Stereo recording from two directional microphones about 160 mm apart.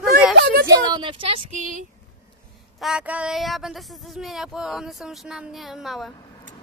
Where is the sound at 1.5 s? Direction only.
55° right (ahead or behind).